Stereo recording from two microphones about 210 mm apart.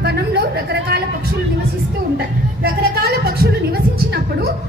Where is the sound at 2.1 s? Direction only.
50° right (ahead or behind).